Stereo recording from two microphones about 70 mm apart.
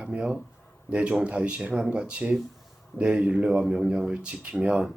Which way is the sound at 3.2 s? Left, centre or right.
Centre.